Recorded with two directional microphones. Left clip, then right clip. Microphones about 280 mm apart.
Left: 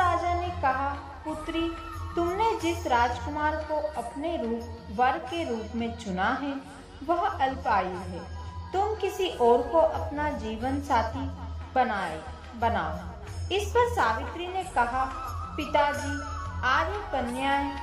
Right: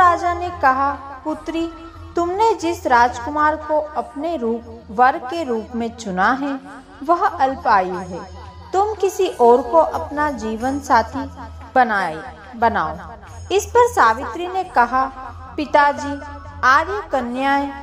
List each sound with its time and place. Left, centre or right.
0.0 s music: right
1.6 s a woman's voice: right